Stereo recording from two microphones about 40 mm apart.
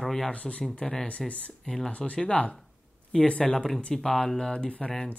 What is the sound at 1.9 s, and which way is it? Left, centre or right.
Speech, left.